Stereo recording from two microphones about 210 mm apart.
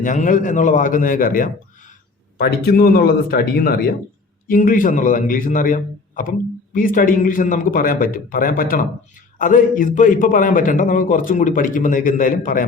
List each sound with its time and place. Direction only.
0.0 s a man's voice: 40° left (ahead or behind)